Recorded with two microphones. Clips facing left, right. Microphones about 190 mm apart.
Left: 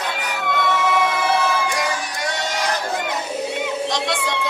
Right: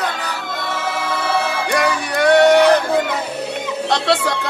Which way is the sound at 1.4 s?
60° right (ahead or behind).